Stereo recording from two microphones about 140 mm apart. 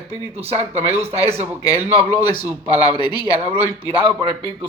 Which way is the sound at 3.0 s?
30° left (ahead or behind).